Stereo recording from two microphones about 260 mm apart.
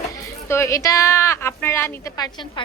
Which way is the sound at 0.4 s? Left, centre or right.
Centre.